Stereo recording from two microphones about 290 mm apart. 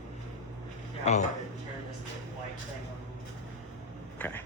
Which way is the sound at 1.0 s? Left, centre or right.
Left.